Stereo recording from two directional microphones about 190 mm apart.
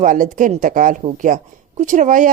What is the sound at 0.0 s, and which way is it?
Speech, 45° right (ahead or behind).